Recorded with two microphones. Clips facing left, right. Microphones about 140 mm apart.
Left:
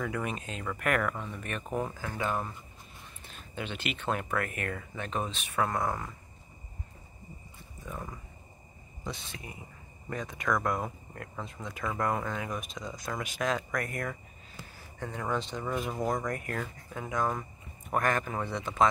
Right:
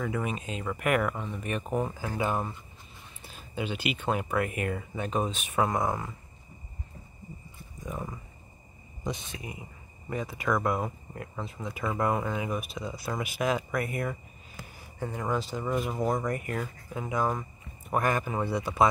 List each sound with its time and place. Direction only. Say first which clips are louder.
0.0 s speech: right 2 dB; 5° right (ahead or behind)
7.8 s speech: right 4 dB; 15° right (ahead or behind)